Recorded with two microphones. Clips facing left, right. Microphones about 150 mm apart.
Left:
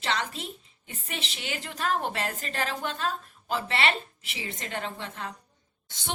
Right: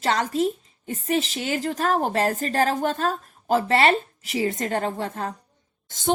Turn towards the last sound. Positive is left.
turn(degrees=-45)  # may be behind; listen again after turning